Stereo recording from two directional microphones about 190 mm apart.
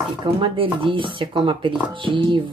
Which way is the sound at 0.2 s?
25° right (ahead or behind).